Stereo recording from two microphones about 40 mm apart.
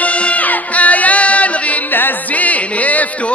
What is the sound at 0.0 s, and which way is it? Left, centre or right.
Music, left.